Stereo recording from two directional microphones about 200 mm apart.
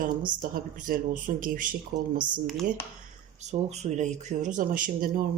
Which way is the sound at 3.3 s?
35° right (ahead or behind).